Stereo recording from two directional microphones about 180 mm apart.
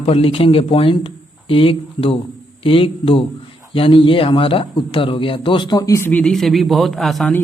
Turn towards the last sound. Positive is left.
turn(degrees=0)  # may be behind; listen again after turning